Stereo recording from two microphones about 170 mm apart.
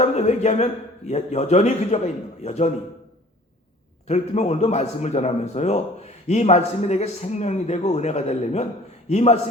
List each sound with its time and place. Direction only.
0.0 s speech: 40° left (ahead or behind)
4.0 s speech: 40° left (ahead or behind)